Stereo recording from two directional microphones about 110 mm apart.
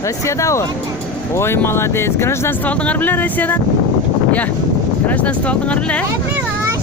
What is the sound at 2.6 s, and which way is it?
Speech, 10° left (ahead or behind).